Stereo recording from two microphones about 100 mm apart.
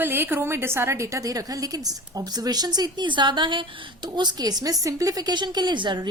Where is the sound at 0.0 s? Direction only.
20° right (ahead or behind).